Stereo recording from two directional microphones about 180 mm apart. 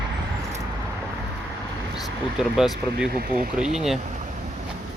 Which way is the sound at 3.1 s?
55° right (ahead or behind).